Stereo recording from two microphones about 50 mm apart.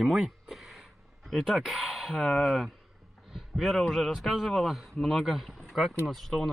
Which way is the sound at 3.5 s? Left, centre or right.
Centre.